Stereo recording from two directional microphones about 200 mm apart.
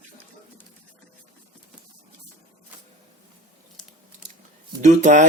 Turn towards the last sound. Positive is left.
turn(degrees=-40)  # may be behind; listen again after turning